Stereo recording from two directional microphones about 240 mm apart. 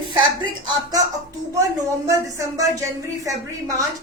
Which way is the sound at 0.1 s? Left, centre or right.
Centre.